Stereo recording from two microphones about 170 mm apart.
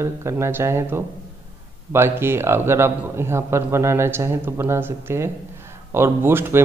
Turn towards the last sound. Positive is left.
turn(degrees=-15)  # may be behind; listen again after turning